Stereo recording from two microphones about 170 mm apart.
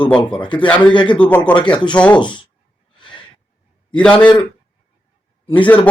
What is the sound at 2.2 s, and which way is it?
Speech, 30° left (ahead or behind).